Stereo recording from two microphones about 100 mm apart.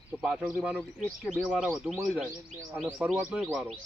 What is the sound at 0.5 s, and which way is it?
A man's voice, 15° right (ahead or behind).